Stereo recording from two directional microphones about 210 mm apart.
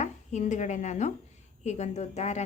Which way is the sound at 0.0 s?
35° left (ahead or behind).